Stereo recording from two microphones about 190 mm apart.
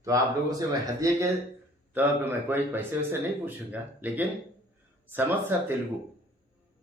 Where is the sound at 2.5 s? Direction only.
10° right (ahead or behind).